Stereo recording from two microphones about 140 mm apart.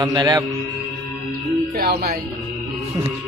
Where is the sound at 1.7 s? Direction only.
90° right.